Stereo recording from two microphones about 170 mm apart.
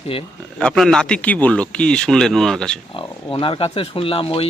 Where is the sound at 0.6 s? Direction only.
Centre (ahead or behind).